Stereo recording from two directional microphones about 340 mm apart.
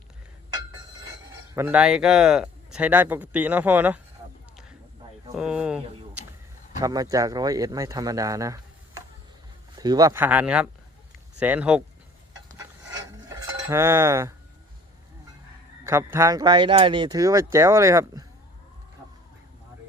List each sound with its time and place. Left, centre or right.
1.5 s speech: centre
5.3 s speech: centre
13.3 s cutlery: centre
15.8 s speech: centre